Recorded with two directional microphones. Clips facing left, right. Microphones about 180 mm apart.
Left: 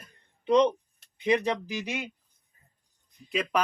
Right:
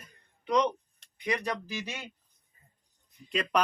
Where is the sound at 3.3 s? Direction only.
Centre (ahead or behind).